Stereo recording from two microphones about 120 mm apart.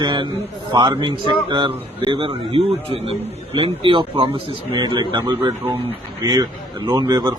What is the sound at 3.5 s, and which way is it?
A man's voice, 45° right (ahead or behind).